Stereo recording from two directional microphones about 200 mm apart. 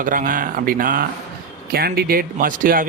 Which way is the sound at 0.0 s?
45° right (ahead or behind).